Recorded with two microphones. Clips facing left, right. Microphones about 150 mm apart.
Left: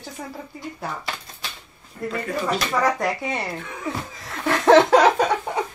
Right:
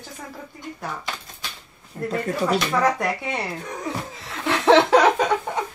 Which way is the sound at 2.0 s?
35° right (ahead or behind).